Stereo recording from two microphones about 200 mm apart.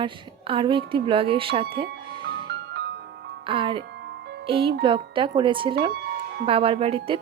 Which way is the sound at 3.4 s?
25° right (ahead or behind).